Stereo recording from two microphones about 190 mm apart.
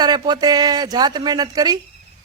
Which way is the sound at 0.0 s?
20° right (ahead or behind).